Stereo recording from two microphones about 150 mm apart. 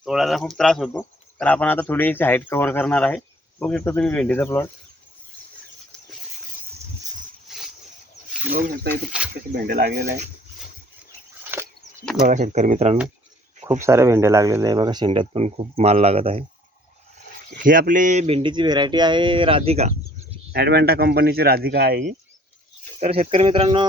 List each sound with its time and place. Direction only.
0.0 s speech: centre (ahead or behind); by 4.7 s 15° left (ahead or behind)
7.4 s a sound: centre (ahead or behind)
9.1 s speech: 5° right (ahead or behind)
9.5 s speech: 90° right
12.3 s speech: 55° right (ahead or behind)
13.8 s speech: 20° right (ahead or behind); by 16.4 s 40° right (ahead or behind)
17.6 s speech: 65° right (ahead or behind); by 19.9 s 45° right (ahead or behind)
20.5 s a man's voice: 90° right
23.0 s speech: 45° right (ahead or behind)